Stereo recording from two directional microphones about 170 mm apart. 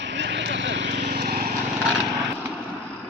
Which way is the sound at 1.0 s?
65° right (ahead or behind).